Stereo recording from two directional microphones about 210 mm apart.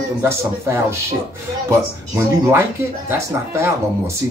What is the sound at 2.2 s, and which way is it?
Speech, 10° right (ahead or behind).